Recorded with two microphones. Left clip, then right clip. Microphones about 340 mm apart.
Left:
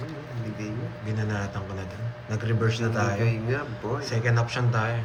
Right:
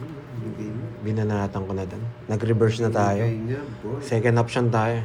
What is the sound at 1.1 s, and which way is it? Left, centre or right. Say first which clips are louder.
A man's voice: right 6 dB; right.